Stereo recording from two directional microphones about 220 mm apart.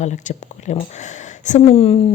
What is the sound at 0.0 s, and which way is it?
A woman's voice, 30° left (ahead or behind).